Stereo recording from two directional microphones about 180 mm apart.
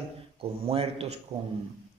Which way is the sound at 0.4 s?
30° right (ahead or behind).